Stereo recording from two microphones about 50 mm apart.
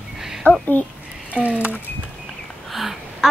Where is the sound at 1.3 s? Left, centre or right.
Right.